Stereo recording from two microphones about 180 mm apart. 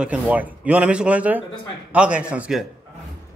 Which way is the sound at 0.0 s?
5° right (ahead or behind).